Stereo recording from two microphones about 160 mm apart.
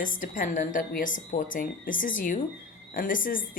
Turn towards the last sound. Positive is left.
turn(degrees=60)  # may be behind; listen again after turning